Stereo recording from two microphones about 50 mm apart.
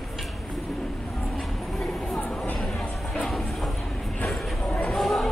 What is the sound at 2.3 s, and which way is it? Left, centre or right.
Chatter, left.